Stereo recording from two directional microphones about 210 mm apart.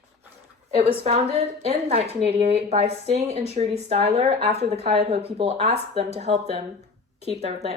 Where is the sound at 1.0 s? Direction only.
30° right (ahead or behind).